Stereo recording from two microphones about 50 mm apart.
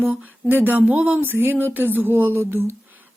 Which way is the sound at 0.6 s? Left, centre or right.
Right.